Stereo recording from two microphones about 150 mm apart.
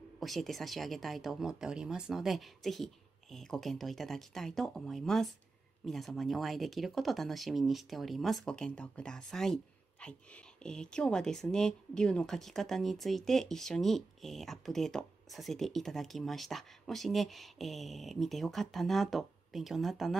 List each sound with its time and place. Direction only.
0.2 s speech: centre (ahead or behind)